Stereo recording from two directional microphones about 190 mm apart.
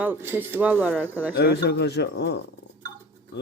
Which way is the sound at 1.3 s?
60° left (ahead or behind).